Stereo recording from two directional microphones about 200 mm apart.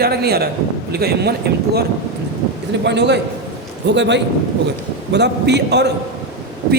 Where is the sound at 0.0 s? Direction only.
50° right (ahead or behind).